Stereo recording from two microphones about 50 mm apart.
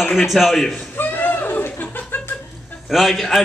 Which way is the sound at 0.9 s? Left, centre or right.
Left.